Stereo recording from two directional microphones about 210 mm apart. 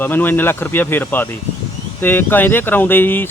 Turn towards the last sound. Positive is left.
turn(degrees=10)  # may be behind; listen again after turning